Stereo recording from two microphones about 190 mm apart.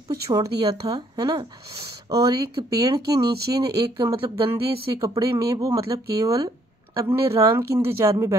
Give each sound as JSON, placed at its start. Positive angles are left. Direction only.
{"t": 0.1, "sound": "speech", "side_deg": -20}